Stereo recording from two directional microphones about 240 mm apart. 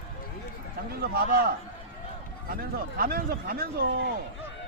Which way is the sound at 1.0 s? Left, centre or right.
Right.